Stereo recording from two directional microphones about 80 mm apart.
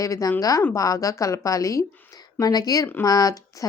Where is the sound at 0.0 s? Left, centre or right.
Left.